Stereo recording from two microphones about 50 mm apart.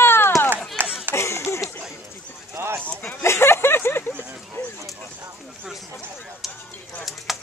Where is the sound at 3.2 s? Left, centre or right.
Left.